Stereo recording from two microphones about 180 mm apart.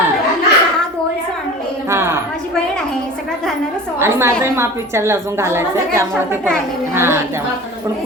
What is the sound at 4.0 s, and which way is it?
A woman's voice, 15° right (ahead or behind).